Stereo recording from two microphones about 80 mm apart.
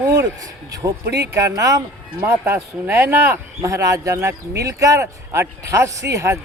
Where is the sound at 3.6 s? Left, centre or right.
Right.